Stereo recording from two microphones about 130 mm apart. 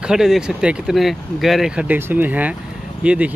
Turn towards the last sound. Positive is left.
turn(degrees=-10)  # may be behind; listen again after turning